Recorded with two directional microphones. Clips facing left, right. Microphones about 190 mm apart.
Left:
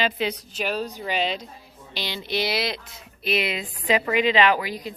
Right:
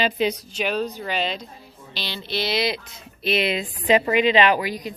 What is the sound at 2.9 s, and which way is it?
A woman's voice, 25° right (ahead or behind).